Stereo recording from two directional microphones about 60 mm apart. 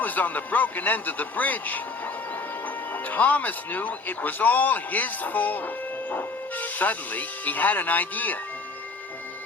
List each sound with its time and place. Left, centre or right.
0.0 s speech: left
2.9 s speech: left